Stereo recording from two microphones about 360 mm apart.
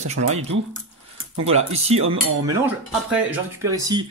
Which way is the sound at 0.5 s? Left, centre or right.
Right.